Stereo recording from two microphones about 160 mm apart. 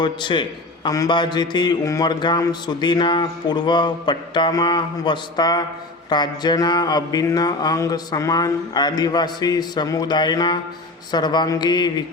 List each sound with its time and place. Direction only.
0.0 s speech: 30° left (ahead or behind)